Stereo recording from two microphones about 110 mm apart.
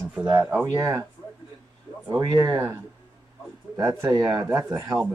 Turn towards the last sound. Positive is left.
turn(degrees=-35)  # may be behind; listen again after turning